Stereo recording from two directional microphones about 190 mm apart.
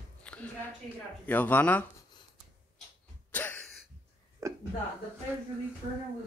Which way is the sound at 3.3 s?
10° left (ahead or behind).